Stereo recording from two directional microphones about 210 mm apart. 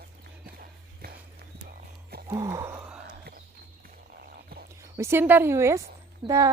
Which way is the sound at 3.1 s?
40° right (ahead or behind).